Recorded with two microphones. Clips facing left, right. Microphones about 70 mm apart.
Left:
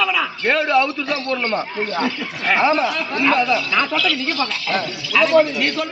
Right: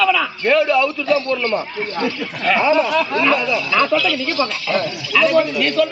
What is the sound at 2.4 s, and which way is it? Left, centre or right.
Speech, centre.